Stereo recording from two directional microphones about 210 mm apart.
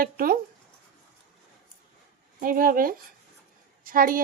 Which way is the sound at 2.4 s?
40° right (ahead or behind).